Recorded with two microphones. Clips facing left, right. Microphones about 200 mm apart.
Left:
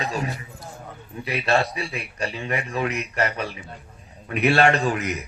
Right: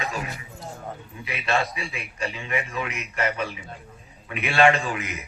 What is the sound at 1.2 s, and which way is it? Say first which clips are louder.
A man's voice: left 4 dB; 35° left (ahead or behind).